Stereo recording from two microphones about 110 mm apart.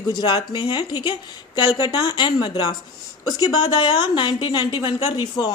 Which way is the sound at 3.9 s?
45° left (ahead or behind).